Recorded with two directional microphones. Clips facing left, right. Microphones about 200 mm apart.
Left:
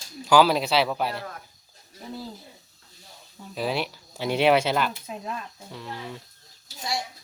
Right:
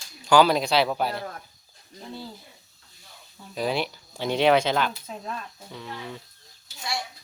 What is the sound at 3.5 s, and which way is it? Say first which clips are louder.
Speech: right 1 dB; centre (ahead or behind).